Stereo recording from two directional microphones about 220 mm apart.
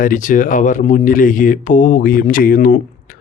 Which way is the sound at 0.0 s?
35° left (ahead or behind).